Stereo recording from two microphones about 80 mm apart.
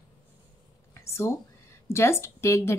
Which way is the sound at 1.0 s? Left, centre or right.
Left.